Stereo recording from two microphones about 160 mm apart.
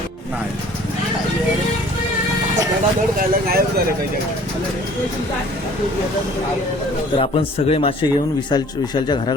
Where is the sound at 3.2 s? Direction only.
70° right (ahead or behind).